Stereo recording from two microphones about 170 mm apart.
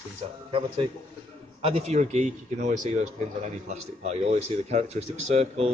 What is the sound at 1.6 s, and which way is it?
A man's voice, 35° right (ahead or behind).